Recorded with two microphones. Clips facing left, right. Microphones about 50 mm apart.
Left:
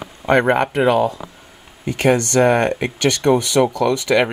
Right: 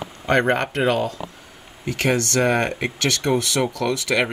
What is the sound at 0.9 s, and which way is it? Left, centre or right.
Speech, left.